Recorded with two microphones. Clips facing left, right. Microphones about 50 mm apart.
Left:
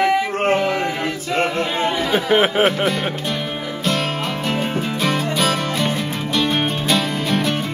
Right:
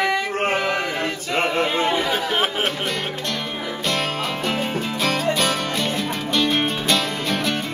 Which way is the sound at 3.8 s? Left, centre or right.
Centre.